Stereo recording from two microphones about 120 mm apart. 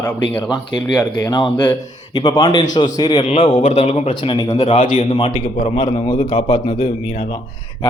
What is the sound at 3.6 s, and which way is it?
Speech, 75° left (ahead or behind).